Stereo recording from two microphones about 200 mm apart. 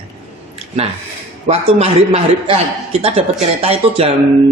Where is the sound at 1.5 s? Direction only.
30° right (ahead or behind).